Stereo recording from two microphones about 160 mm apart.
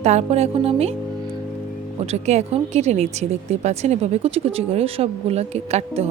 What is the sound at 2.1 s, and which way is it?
Speech, 40° right (ahead or behind).